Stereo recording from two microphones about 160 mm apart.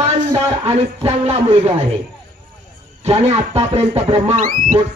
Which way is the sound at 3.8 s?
40° right (ahead or behind).